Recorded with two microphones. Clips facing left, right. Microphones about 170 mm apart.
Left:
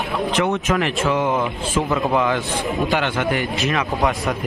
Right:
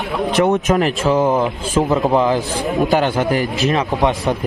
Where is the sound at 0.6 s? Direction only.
40° right (ahead or behind).